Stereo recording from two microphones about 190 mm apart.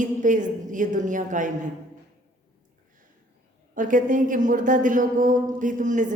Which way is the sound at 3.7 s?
45° right (ahead or behind).